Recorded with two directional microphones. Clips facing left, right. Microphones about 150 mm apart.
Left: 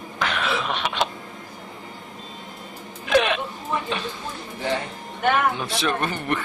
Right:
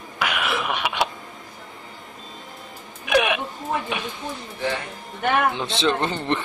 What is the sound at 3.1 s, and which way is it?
Music, 15° right (ahead or behind).